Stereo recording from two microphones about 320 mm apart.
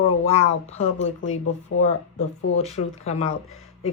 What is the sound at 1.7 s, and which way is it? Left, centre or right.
Speech, left.